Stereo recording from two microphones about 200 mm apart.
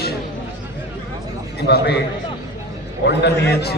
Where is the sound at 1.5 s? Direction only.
55° left (ahead or behind).